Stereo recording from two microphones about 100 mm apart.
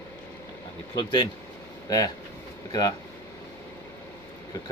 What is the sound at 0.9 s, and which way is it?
Speech, 50° left (ahead or behind).